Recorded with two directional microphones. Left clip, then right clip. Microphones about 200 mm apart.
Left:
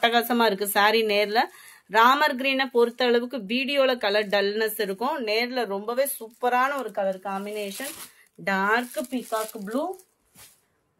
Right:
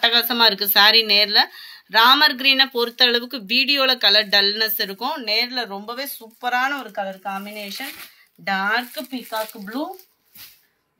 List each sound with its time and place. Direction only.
0.0 s speech: 50° left (ahead or behind)